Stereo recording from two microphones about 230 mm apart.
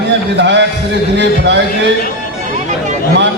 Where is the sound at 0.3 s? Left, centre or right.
Right.